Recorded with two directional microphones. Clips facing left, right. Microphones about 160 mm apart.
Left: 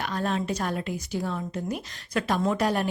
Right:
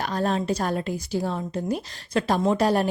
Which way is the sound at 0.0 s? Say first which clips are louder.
Right 3 dB; 35° right (ahead or behind).